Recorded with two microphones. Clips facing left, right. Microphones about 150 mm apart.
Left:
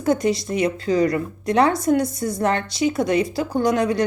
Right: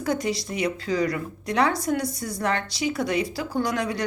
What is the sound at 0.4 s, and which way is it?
Speech, 45° left (ahead or behind).